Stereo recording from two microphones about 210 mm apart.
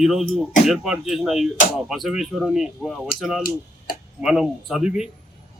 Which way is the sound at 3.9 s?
45° left (ahead or behind).